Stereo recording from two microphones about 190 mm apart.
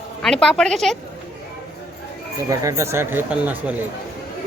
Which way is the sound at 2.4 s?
15° right (ahead or behind).